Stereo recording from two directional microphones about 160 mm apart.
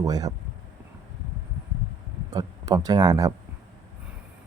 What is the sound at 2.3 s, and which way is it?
Speech, 25° right (ahead or behind).